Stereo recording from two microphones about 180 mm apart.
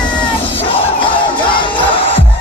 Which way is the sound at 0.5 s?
30° left (ahead or behind).